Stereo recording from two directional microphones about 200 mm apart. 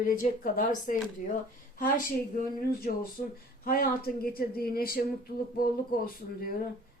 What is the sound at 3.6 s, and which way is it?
A woman's voice, 45° left (ahead or behind).